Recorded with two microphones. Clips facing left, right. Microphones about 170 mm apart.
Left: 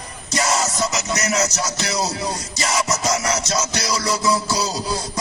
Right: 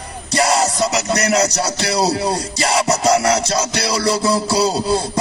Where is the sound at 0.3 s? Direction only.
30° right (ahead or behind).